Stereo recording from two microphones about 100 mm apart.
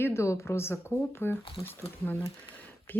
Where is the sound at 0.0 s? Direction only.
25° left (ahead or behind).